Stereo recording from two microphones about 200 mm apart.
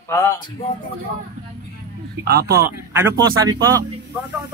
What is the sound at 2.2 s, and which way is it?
Speech, 50° right (ahead or behind).